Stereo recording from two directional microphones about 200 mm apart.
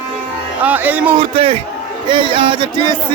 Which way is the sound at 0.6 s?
10° right (ahead or behind).